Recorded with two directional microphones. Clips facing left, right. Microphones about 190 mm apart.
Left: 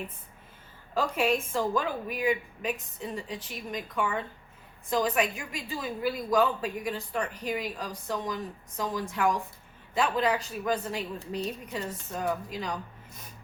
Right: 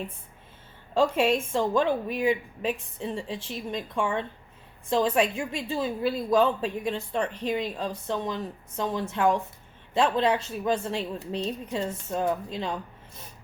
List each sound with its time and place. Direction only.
0.9 s a woman's voice: 25° right (ahead or behind)